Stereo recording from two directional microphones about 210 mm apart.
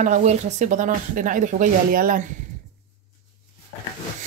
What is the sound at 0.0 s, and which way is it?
Speech, 35° right (ahead or behind).